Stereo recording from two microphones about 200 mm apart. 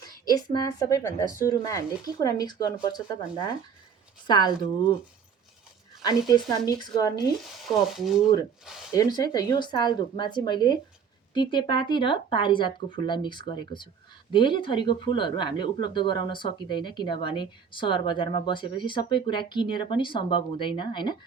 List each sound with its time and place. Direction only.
0.0 s speech: 20° left (ahead or behind)
6.1 s speech: 20° left (ahead or behind)
7.9 s speech: centre (ahead or behind)
8.9 s speech: 20° left (ahead or behind)